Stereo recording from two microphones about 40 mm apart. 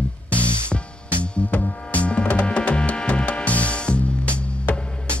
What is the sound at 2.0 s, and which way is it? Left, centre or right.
Music, left.